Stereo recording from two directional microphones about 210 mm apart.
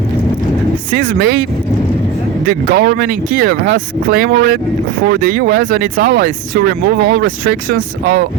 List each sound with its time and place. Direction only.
0.9 s speech: 45° right (ahead or behind)
2.5 s speech: 45° right (ahead or behind)
7.7 s speech: 45° right (ahead or behind)